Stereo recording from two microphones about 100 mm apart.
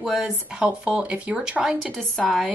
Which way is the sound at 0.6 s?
15° right (ahead or behind).